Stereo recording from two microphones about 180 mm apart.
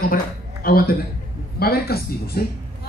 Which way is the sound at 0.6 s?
55° left (ahead or behind).